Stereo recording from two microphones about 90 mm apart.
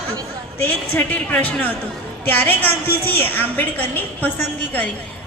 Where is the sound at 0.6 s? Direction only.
20° left (ahead or behind).